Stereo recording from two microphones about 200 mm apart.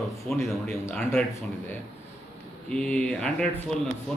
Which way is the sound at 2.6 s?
5° left (ahead or behind).